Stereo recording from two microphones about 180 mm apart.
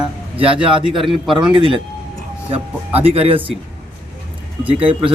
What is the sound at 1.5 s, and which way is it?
Speech, 30° right (ahead or behind).